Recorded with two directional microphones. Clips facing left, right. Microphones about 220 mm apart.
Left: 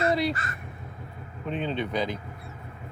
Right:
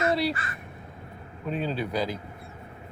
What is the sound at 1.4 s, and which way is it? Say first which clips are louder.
Speech: even; 5° right (ahead or behind).